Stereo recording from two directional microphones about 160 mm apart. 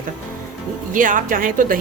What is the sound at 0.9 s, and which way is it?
Speech, 55° right (ahead or behind).